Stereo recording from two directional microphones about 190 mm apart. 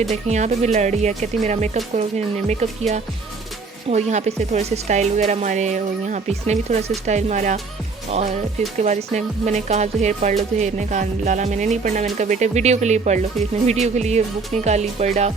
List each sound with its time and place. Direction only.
0.1 s music: 35° right (ahead or behind)
3.8 s music: 35° right (ahead or behind)
8.8 s music: 40° right (ahead or behind)